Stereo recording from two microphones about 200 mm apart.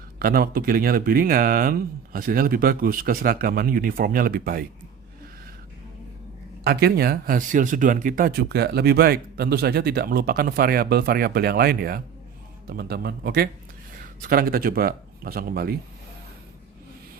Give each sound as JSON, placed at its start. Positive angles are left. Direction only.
{"t": 0.2, "sound": "speech", "side_deg": -50}
{"t": 6.7, "sound": "a man's voice", "side_deg": -55}